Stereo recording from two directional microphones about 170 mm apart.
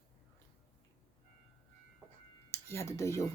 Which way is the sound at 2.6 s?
15° left (ahead or behind).